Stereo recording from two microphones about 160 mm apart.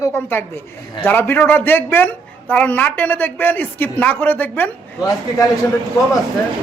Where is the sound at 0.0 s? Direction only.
15° left (ahead or behind).